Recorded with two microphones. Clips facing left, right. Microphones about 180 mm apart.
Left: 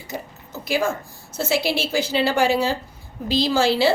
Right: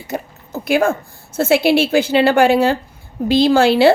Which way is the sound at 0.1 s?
55° right (ahead or behind).